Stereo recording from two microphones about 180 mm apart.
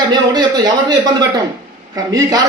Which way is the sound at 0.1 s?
20° right (ahead or behind).